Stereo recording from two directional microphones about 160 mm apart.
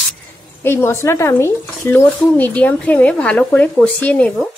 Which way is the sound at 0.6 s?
15° left (ahead or behind).